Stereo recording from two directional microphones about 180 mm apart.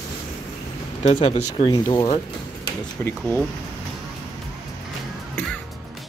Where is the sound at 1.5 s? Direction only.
25° left (ahead or behind).